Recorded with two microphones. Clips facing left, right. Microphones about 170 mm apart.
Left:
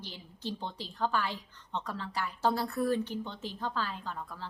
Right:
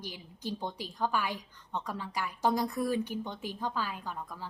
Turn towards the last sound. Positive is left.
turn(degrees=-10)  # may be behind; listen again after turning